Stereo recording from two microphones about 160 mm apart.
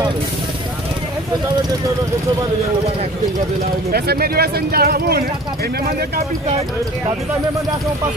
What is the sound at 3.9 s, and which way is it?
Speech, 75° right (ahead or behind).